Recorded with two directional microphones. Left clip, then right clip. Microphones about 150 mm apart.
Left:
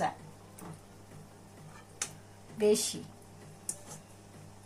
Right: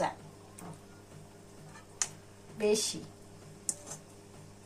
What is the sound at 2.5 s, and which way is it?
Speech, 50° right (ahead or behind).